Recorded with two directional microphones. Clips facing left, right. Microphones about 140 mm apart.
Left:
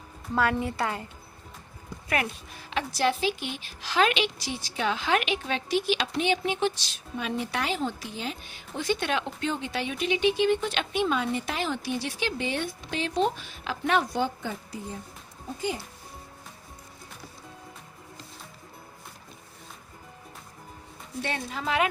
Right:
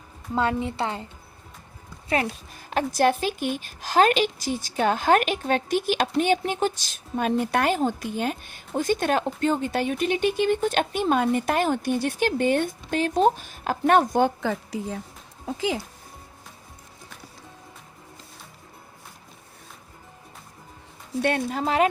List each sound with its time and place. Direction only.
0.3 s a woman's voice: 25° right (ahead or behind)
2.5 s speech: 45° right (ahead or behind)
14.4 s a woman's voice: 90° right
21.2 s speech: 55° right (ahead or behind)